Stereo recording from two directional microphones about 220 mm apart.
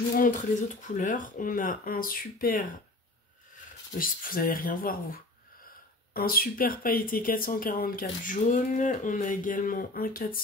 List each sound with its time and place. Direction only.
0.2 s speech: 35° left (ahead or behind)
4.0 s speech: 40° left (ahead or behind)